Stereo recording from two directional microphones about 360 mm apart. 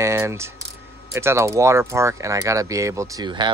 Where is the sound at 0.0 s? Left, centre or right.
Centre.